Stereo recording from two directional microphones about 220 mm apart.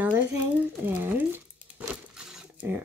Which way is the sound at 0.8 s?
10° right (ahead or behind).